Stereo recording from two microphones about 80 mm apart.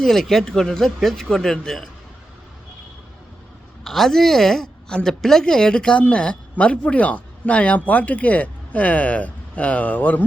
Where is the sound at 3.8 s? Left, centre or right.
Centre.